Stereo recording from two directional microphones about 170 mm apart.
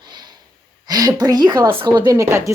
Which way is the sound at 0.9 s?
20° right (ahead or behind).